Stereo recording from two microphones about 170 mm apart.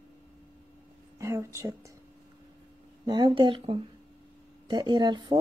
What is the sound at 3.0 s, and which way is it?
Speech, 25° right (ahead or behind).